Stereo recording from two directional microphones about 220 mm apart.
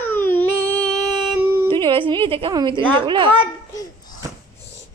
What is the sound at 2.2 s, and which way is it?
Speech, 25° right (ahead or behind).